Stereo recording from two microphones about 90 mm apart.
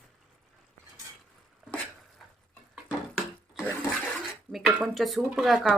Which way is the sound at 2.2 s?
Centre (ahead or behind).